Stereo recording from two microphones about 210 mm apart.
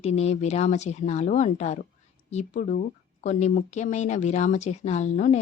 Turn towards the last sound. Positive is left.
turn(degrees=35)  # may be behind; listen again after turning